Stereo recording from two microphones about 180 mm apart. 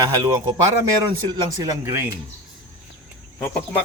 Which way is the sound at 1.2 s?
25° right (ahead or behind).